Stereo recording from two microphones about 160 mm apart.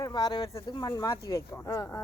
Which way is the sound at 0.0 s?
25° left (ahead or behind).